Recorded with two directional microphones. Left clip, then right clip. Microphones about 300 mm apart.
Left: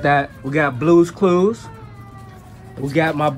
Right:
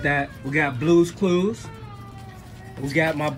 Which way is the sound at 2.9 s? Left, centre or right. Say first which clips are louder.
Left 4 dB; left.